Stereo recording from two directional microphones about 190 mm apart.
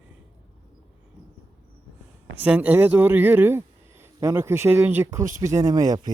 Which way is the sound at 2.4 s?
10° right (ahead or behind).